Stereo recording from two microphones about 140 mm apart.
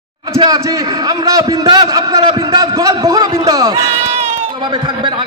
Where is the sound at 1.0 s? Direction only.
25° right (ahead or behind).